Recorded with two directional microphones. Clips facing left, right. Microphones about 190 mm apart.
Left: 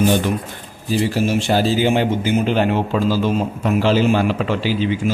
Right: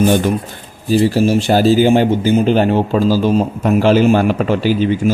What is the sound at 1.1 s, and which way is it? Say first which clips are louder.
A man's voice: right 5 dB; 35° right (ahead or behind).